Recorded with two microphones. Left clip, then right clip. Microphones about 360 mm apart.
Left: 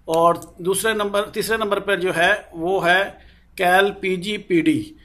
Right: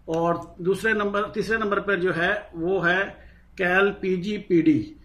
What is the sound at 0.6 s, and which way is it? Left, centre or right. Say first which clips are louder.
A man's voice: even; centre.